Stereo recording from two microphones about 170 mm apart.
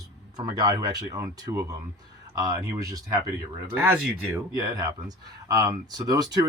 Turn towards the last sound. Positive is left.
turn(degrees=-20)  # may be behind; listen again after turning